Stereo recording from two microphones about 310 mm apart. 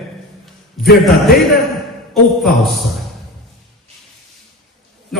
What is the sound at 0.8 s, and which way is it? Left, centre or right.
Speech, centre.